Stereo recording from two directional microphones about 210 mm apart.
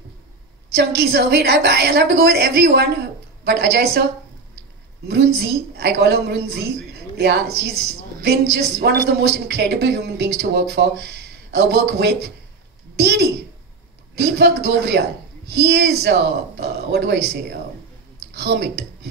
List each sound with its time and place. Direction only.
0.7 s a woman's voice: 50° right (ahead or behind)
5.0 s a woman's voice: 50° right (ahead or behind)
14.4 s a woman's voice: 55° right (ahead or behind)